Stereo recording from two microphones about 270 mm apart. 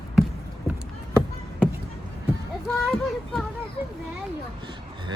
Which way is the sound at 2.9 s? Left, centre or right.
Centre.